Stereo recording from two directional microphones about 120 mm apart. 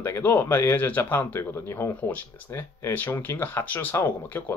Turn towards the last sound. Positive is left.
turn(degrees=15)  # may be behind; listen again after turning